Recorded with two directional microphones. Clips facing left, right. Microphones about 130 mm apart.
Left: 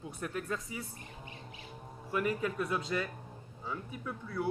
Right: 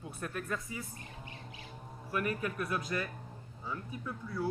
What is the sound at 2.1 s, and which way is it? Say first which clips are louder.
Speech: left 2 dB; 20° left (ahead or behind).